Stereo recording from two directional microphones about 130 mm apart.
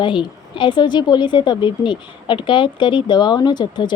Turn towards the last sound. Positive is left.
turn(degrees=35)  # may be behind; listen again after turning